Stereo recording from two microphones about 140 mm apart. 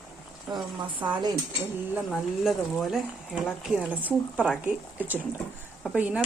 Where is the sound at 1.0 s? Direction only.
35° right (ahead or behind).